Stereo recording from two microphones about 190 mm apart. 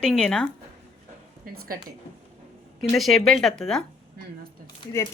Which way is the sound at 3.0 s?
Centre (ahead or behind).